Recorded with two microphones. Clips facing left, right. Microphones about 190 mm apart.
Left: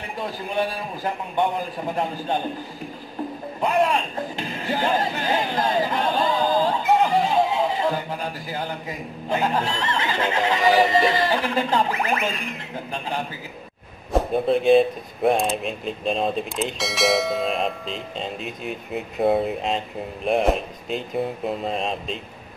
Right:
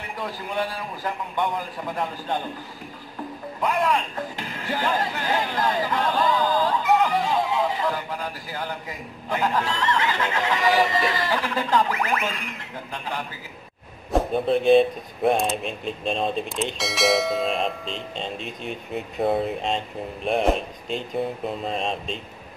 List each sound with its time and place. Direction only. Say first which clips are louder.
0.2 s speech: left 3 dB; 25° left (ahead or behind)
3.6 s speech: left 2 dB; 25° left (ahead or behind)
14.1 s speech: left 1 dB; centre (ahead or behind)